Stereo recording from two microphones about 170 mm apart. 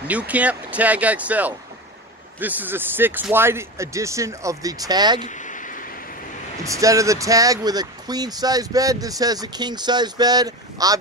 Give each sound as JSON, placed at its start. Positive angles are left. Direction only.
{"t": 0.1, "sound": "speech", "side_deg": -10}
{"t": 5.2, "sound": "a sound", "side_deg": 45}
{"t": 6.6, "sound": "speech", "side_deg": -20}